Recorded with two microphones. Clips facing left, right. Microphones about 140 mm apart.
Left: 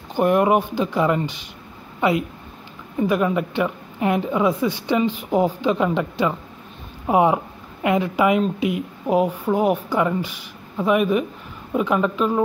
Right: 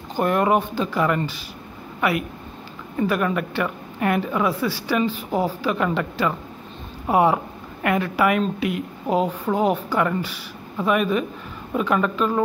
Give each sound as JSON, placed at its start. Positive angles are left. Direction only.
{"t": 0.1, "sound": "a woman's voice", "side_deg": 15}